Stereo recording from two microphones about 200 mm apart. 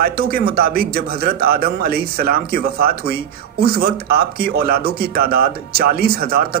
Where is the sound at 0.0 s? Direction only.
50° right (ahead or behind).